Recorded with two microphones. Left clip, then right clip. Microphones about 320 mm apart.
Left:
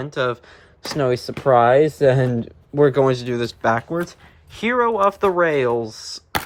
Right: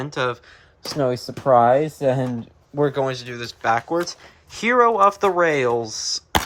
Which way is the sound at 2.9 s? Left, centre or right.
Centre.